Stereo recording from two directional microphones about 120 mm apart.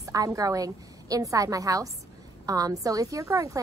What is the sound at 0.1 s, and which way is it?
A woman's voice, 30° right (ahead or behind).